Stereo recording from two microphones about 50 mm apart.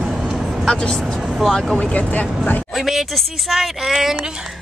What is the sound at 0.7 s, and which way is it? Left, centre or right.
Speech, centre.